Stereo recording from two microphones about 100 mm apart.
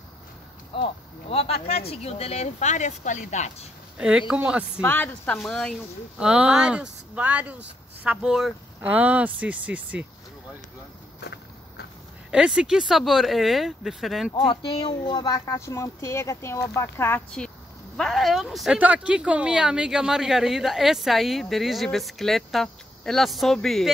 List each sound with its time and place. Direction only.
0.7 s speech: 65° left (ahead or behind)
1.3 s speech: 75° left (ahead or behind)
4.3 s speech: 10° right (ahead or behind)
4.8 s speech: 20° left (ahead or behind)
6.1 s speech: 10° right (ahead or behind)
8.3 s speech: 5° right (ahead or behind)
8.8 s speech: 15° right (ahead or behind)
12.3 s speech: 5° right (ahead or behind)
14.3 s speech: 55° left (ahead or behind)
14.9 s speech: 45° left (ahead or behind); by 17.2 s 25° left (ahead or behind)
17.9 s speech: 5° left (ahead or behind)
18.8 s speech: 15° right (ahead or behind); by 23.9 s 5° left (ahead or behind)